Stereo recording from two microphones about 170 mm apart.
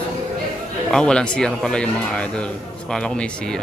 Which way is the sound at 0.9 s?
5° left (ahead or behind).